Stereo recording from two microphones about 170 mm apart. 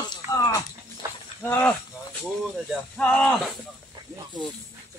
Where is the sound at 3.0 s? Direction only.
10° left (ahead or behind).